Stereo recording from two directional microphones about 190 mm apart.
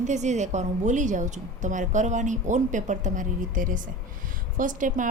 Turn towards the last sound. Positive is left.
turn(degrees=-45)  # may be behind; listen again after turning